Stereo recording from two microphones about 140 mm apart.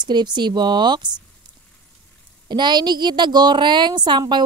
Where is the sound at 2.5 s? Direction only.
30° right (ahead or behind).